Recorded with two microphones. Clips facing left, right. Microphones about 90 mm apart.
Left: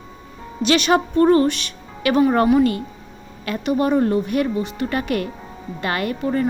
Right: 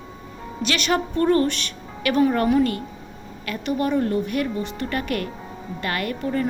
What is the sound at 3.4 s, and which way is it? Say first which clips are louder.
Speech: left 4 dB; 25° left (ahead or behind).